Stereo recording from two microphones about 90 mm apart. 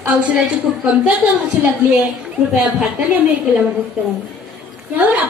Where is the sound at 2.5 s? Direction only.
20° right (ahead or behind).